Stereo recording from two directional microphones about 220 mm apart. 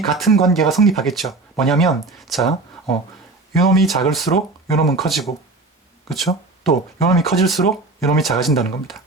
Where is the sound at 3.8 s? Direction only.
Centre (ahead or behind).